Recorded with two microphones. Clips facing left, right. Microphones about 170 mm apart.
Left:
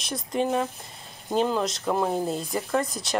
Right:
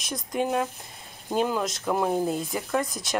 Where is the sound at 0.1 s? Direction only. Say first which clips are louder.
Left 1 dB; centre (ahead or behind).